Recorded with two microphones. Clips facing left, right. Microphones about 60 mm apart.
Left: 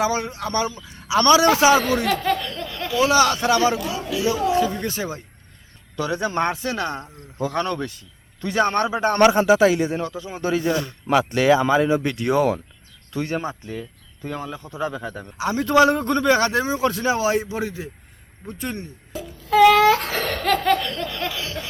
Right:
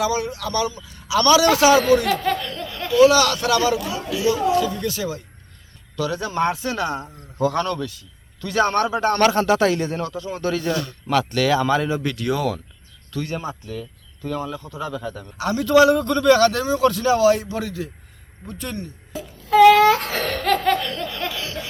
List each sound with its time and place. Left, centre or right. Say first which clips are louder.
0.0 s a man's voice: even; left
2.2 s a sound: even; centre
3.0 s a man's voice: right 3 dB; left
3.8 s speech: even; centre
4.3 s a man's voice: right 1 dB; left
6.5 s speech: right 1 dB; centre
7.3 s speech: right 4 dB; centre
7.8 s speech: even; left
8.4 s a man's voice: right 1 dB; centre; by 13.5 s left
14.2 s a man's voice: right 3 dB; centre
19.5 s laughter: right 2 dB; centre